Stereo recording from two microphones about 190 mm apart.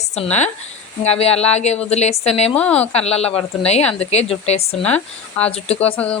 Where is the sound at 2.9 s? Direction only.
35° left (ahead or behind).